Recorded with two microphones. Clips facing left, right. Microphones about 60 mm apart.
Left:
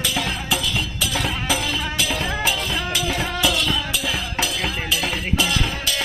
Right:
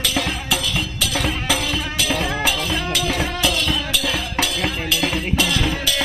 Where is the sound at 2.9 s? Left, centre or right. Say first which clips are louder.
Right 2 dB; right.